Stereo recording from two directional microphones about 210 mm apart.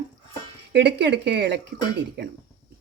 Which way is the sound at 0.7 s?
55° right (ahead or behind).